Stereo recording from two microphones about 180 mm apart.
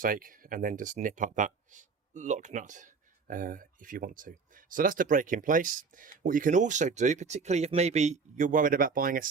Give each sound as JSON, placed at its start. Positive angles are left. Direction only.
{"t": 0.0, "sound": "speech", "side_deg": -50}